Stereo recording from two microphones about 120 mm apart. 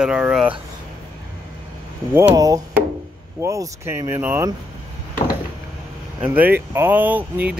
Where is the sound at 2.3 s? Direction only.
30° right (ahead or behind).